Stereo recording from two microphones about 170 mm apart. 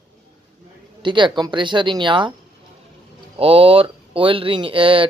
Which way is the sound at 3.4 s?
35° right (ahead or behind).